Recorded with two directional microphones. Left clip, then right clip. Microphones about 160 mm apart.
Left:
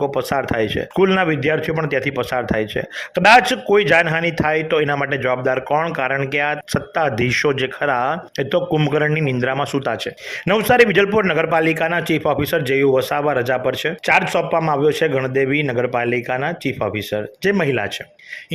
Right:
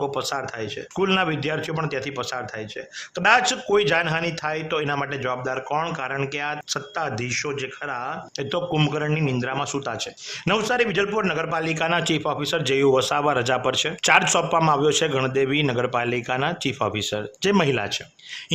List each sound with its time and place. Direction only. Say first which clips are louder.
0.0 s a man's voice: left 6 dB; 15° left (ahead or behind)
0.4 s a man's voice: left 10 dB; 25° left (ahead or behind)
9.6 s a man's voice: left 6 dB; 15° left (ahead or behind)
11.9 s speech: left 4 dB; 5° left (ahead or behind)